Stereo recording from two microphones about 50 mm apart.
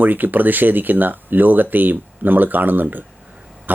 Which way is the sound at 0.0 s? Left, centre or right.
Right.